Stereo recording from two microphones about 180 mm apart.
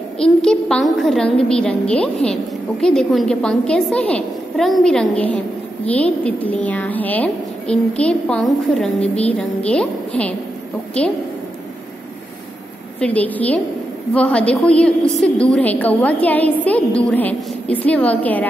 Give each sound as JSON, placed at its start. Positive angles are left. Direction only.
{"t": 0.2, "sound": "a woman's voice", "side_deg": 5}
{"t": 13.0, "sound": "a woman's voice", "side_deg": 10}